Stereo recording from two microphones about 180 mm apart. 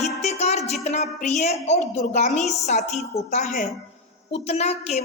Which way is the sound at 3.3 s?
45° left (ahead or behind).